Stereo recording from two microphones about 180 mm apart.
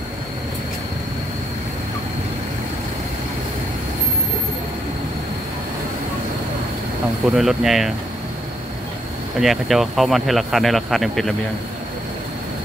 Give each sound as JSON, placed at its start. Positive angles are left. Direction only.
{"t": 7.2, "sound": "speech", "side_deg": 0}
{"t": 9.4, "sound": "speech", "side_deg": 0}